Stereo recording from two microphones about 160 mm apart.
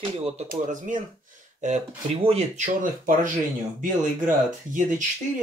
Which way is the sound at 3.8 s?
55° right (ahead or behind).